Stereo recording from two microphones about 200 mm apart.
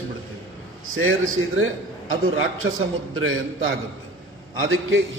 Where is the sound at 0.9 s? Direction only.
90° right.